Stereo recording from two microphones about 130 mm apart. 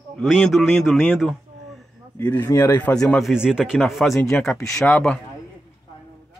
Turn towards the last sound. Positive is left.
turn(degrees=10)  # may be behind; listen again after turning